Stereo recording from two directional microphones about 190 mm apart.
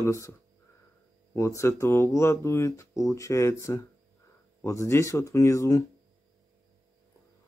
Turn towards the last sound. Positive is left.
turn(degrees=15)  # may be behind; listen again after turning